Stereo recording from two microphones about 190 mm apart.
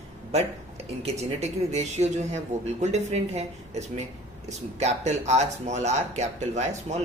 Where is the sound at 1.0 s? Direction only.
35° right (ahead or behind).